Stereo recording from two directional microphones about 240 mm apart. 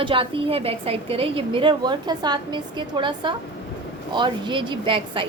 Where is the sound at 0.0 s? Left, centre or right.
Right.